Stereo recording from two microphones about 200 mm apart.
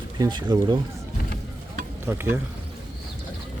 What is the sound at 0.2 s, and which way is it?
Speech, 20° right (ahead or behind).